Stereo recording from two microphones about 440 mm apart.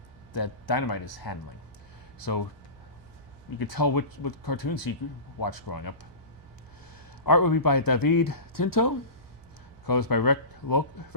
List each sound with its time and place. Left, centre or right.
0.3 s speech: left
2.2 s speech: left
3.6 s speech: left
4.3 s speech: left
7.3 s speech: left